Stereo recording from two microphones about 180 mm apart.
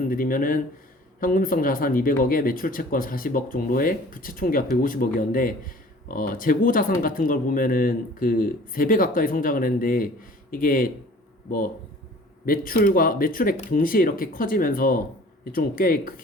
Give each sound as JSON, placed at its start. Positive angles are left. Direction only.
{"t": 0.1, "sound": "speech", "side_deg": 50}
{"t": 12.5, "sound": "speech", "side_deg": 50}